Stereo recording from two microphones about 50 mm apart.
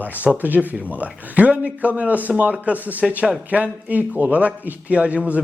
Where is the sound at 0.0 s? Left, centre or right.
Right.